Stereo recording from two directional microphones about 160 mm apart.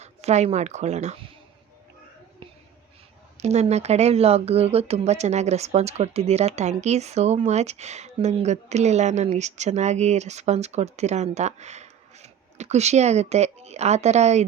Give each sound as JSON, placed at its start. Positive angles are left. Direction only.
{"t": 0.0, "sound": "speech", "side_deg": -45}
{"t": 3.3, "sound": "speech", "side_deg": -45}